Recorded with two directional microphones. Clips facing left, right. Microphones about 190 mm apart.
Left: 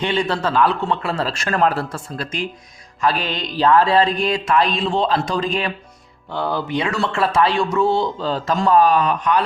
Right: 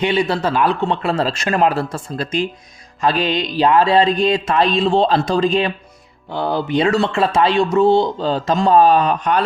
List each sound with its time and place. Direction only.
0.0 s a man's voice: 10° right (ahead or behind)
3.0 s music: 20° right (ahead or behind)